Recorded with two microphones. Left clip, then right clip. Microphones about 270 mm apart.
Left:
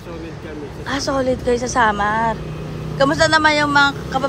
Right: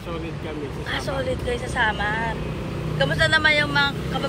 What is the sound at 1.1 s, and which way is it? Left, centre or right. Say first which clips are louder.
Speech: left 10 dB; centre.